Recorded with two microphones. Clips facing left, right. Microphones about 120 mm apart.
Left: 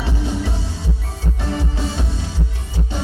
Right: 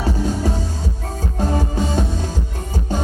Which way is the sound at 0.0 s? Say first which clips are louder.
Right 3 dB; 40° right (ahead or behind).